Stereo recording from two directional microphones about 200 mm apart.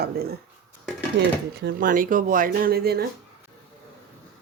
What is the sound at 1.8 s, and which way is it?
Speech, 45° right (ahead or behind).